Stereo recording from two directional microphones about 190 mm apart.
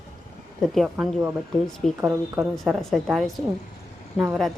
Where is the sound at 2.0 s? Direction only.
15° right (ahead or behind).